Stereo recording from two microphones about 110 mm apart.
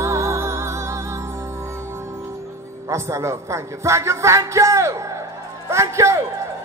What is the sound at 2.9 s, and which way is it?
A man's voice, 25° right (ahead or behind).